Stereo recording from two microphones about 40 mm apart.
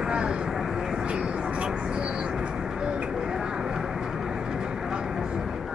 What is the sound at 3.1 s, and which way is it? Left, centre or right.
Vehicle, centre.